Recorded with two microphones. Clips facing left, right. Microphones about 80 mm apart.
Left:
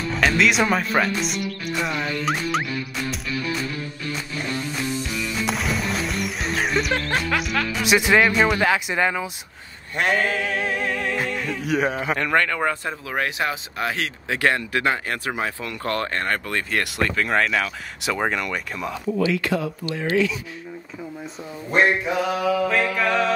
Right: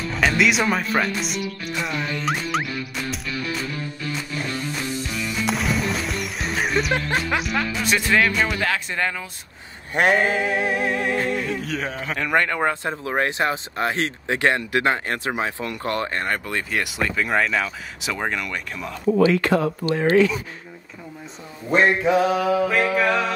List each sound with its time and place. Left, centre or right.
0.1 s speech: centre
5.4 s music: centre
7.2 s a sound: centre
7.8 s speech: centre
9.9 s a sound: centre
11.2 s speech: centre
11.6 s speech: centre
12.4 s speech: right
16.7 s speech: centre
19.0 s speech: right
22.3 s speech: right
22.9 s speech: centre